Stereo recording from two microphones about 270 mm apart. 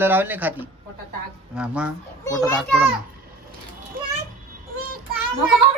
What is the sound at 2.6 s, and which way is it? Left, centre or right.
Speech, centre.